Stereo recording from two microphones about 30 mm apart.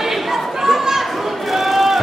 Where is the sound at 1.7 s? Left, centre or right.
Centre.